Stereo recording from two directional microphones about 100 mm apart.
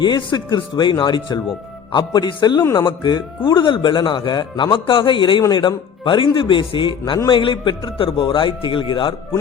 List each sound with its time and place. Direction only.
0.0 s a man's voice: 45° left (ahead or behind)